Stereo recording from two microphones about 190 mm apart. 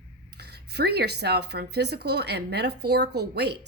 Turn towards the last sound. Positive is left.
turn(degrees=-60)  # may be behind; listen again after turning